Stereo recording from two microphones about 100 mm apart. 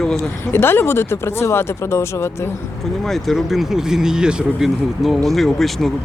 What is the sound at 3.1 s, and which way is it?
Speech, centre (ahead or behind).